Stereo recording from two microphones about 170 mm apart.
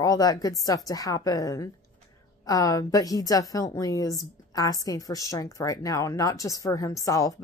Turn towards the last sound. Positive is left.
turn(degrees=20)  # may be behind; listen again after turning